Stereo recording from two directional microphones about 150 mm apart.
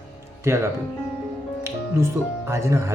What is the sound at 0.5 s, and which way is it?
Speech, 20° right (ahead or behind).